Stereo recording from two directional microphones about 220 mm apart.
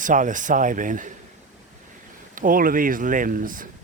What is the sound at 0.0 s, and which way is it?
Speech, 35° right (ahead or behind).